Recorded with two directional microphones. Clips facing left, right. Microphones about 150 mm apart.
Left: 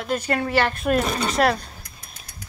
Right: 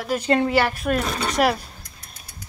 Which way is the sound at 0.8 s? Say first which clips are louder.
Left 2 dB; 5° left (ahead or behind).